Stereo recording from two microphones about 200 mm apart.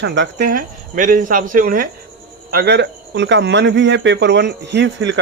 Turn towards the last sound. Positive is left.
turn(degrees=-65)  # may be behind; listen again after turning